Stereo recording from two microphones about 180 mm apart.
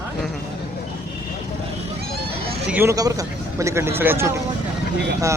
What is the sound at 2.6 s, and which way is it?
Speech, 10° right (ahead or behind).